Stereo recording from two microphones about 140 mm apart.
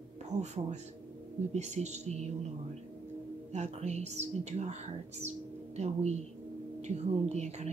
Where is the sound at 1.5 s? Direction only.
55° right (ahead or behind).